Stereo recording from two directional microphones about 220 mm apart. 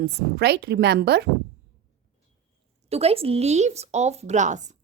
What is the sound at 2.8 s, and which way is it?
A woman's voice, 30° right (ahead or behind).